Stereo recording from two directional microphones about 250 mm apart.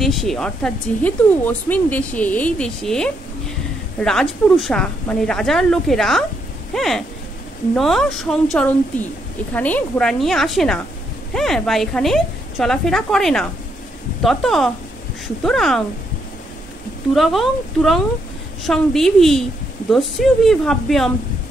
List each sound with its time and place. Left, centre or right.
0.0 s a woman's voice: centre
17.1 s speech: centre